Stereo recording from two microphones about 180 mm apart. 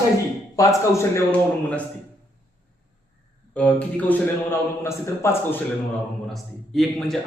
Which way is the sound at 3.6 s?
10° left (ahead or behind).